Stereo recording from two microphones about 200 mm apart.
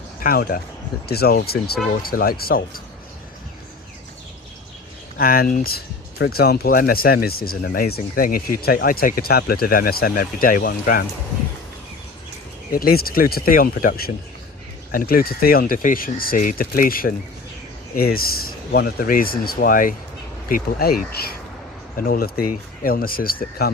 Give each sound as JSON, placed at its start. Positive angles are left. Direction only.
{"t": 0.2, "sound": "speech", "side_deg": 45}
{"t": 5.1, "sound": "speech", "side_deg": 50}
{"t": 12.7, "sound": "speech", "side_deg": 50}